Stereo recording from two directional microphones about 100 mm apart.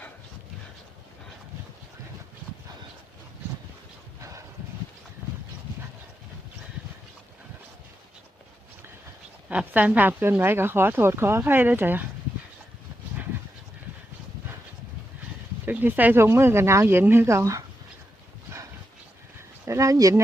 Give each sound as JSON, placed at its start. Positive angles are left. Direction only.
{"t": 9.5, "sound": "speech", "side_deg": -15}
{"t": 15.6, "sound": "speech", "side_deg": -20}
{"t": 19.6, "sound": "a sound", "side_deg": -30}